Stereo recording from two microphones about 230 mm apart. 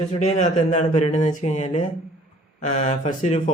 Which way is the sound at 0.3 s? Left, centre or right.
Left.